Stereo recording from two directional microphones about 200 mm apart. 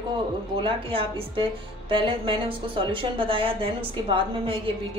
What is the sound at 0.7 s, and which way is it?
A woman's voice, 25° right (ahead or behind).